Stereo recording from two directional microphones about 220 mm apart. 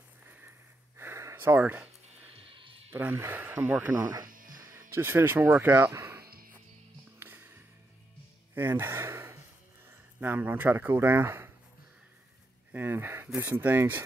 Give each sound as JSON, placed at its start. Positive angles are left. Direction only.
{"t": 0.9, "sound": "a sound", "side_deg": -10}
{"t": 2.3, "sound": "a sound", "side_deg": -25}
{"t": 2.9, "sound": "speech", "side_deg": -10}
{"t": 4.3, "sound": "music", "side_deg": -40}
{"t": 4.6, "sound": "speech", "side_deg": -10}
{"t": 6.2, "sound": "music", "side_deg": -45}
{"t": 7.2, "sound": "music", "side_deg": -10}
{"t": 8.5, "sound": "gasp", "side_deg": -10}
{"t": 9.8, "sound": "speech", "side_deg": -10}
{"t": 12.7, "sound": "speech", "side_deg": -10}